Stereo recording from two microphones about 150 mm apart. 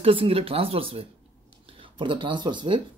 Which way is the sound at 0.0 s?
40° right (ahead or behind).